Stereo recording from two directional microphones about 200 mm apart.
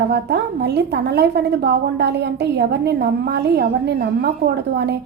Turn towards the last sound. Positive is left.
turn(degrees=-55)  # may be behind; listen again after turning